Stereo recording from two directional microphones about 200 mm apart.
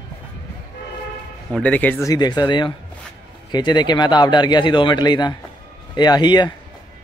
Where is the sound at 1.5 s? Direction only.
5° left (ahead or behind).